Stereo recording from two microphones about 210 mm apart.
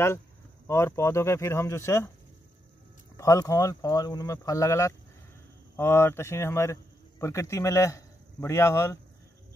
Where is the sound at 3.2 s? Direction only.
15° left (ahead or behind).